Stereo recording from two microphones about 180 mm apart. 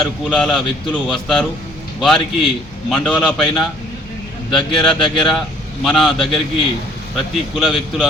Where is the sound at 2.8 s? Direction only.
5° left (ahead or behind).